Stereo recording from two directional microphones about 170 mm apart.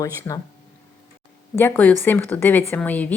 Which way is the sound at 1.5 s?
10° left (ahead or behind).